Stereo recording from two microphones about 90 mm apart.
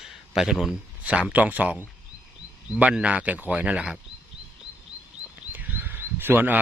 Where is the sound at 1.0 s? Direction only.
15° right (ahead or behind).